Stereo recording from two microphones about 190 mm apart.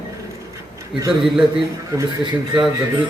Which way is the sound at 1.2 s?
Centre (ahead or behind).